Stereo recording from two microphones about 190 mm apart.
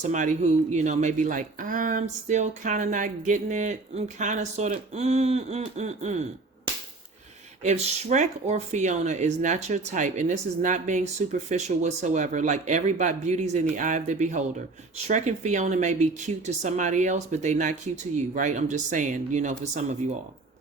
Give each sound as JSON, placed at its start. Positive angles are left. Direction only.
{"t": 0.0, "sound": "speech", "side_deg": -40}
{"t": 7.6, "sound": "speech", "side_deg": -40}